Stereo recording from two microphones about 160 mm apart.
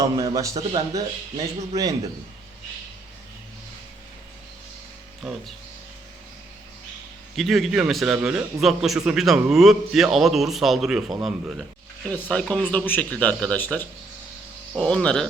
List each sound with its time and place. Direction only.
0.2 s speech: 20° right (ahead or behind)
7.3 s a man's voice: centre (ahead or behind)